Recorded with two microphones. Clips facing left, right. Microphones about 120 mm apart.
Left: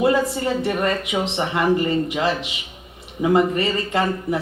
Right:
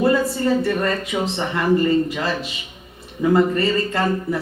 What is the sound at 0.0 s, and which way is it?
Speech, 20° left (ahead or behind).